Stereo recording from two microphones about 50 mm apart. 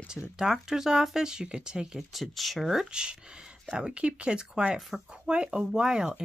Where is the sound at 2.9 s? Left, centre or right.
Centre.